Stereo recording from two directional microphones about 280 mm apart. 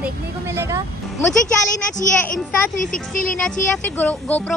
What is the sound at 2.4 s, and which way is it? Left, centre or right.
Speech, centre.